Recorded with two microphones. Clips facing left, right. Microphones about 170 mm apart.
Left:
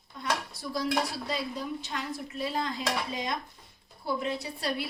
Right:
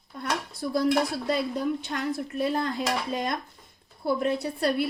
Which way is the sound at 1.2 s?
55° right (ahead or behind).